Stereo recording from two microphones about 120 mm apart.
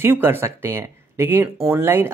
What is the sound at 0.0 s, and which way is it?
Speech, 20° right (ahead or behind).